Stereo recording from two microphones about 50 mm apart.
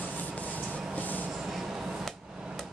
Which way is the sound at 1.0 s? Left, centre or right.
Left.